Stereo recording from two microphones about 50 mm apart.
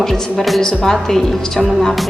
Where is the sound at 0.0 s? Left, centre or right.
Centre.